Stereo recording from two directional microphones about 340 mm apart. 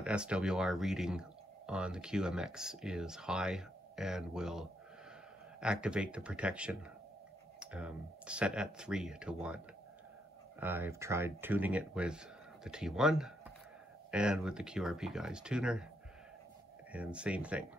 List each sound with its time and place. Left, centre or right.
0.0 s speech: centre
10.6 s speech: centre
16.9 s speech: centre